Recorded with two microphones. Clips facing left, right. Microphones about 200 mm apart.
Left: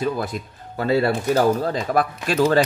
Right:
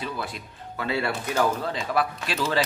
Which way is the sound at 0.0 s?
45° left (ahead or behind).